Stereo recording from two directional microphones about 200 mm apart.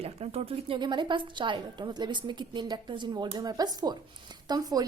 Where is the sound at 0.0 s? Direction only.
30° right (ahead or behind).